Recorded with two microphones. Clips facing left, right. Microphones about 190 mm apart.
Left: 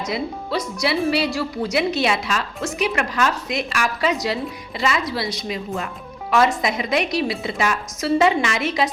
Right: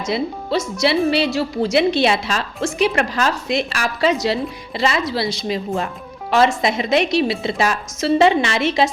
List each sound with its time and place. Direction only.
0.0 s speech: 25° right (ahead or behind)